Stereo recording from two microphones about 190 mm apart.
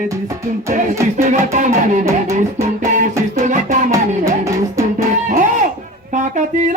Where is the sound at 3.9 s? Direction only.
15° right (ahead or behind).